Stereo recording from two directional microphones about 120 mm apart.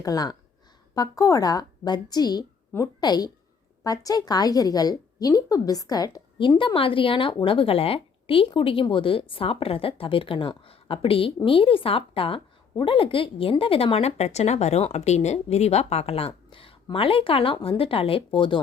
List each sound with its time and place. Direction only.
0.0 s a woman's voice: 30° left (ahead or behind)
6.6 s a woman's voice: 45° left (ahead or behind)